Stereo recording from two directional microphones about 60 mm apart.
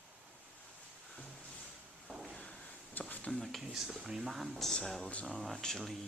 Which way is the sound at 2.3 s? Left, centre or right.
Centre.